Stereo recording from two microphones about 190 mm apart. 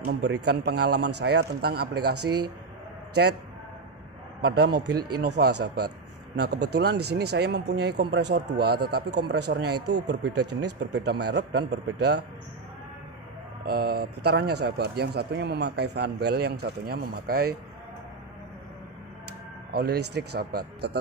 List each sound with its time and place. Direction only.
0.1 s a man's voice: 65° right (ahead or behind)
2.2 s speech: 25° right (ahead or behind)
4.4 s a man's voice: 55° right (ahead or behind)
13.7 s a man's voice: 55° right (ahead or behind)
19.7 s a man's voice: 55° right (ahead or behind)